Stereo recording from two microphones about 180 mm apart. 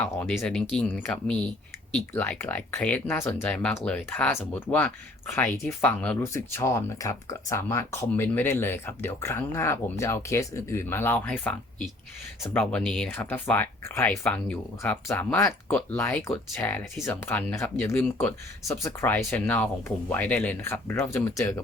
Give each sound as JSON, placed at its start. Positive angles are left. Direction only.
{"t": 0.0, "sound": "speech", "side_deg": 10}